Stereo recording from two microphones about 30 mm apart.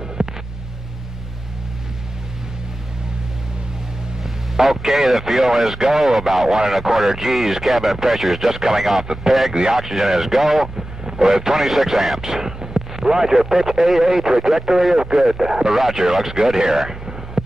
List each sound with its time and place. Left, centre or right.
0.2 s a sound: right
4.2 s vehicle: centre
5.5 s speech: centre
7.1 s speech: centre
7.6 s speech: centre
9.0 s a man's voice: right
9.8 s speech: centre
11.1 s speech: centre
11.5 s speech: centre
12.2 s a sound: centre
13.0 s a man's voice: centre